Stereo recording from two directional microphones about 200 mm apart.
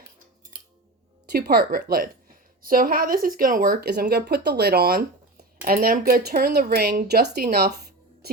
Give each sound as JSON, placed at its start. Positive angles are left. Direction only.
{"t": 1.3, "sound": "a woman's voice", "side_deg": -55}